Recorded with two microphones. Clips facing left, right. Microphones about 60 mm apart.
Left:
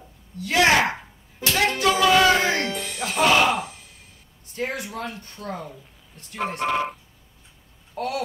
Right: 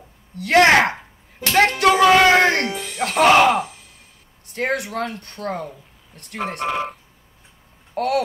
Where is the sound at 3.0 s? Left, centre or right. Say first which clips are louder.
Right 6 dB; right.